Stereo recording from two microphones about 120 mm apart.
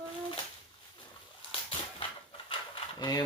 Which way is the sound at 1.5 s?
45° left (ahead or behind).